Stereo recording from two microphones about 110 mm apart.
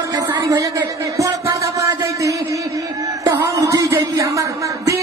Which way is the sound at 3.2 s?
30° right (ahead or behind).